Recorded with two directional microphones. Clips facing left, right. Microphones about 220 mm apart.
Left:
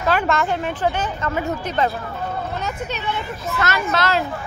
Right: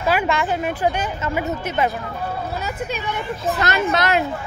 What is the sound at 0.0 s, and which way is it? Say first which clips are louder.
A woman's voice: even; 10° right (ahead or behind).